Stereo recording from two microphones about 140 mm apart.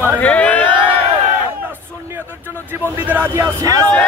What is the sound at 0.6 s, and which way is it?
Speech, 35° right (ahead or behind).